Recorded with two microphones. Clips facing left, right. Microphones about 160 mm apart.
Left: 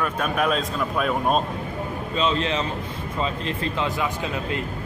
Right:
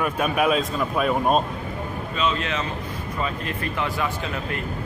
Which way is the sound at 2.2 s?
30° left (ahead or behind).